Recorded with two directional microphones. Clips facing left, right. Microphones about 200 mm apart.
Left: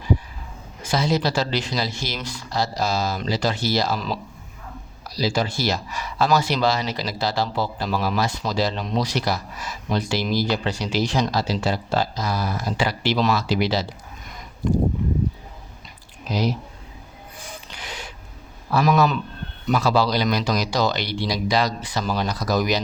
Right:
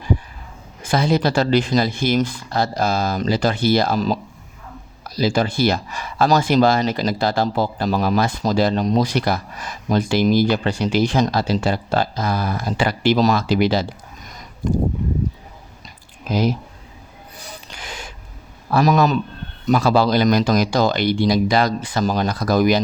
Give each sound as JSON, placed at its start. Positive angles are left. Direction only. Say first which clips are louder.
{"t": 0.8, "sound": "speech", "louder": "right 4 dB", "side_deg": -55}
{"t": 16.3, "sound": "speech", "louder": "right 4 dB", "side_deg": -50}
{"t": 17.7, "sound": "a sound", "louder": "right 3 dB", "side_deg": -45}
{"t": 18.7, "sound": "a man's voice", "louder": "right 3 dB", "side_deg": -40}